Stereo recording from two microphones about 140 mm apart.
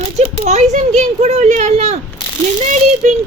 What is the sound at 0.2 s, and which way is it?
Speech, 55° right (ahead or behind).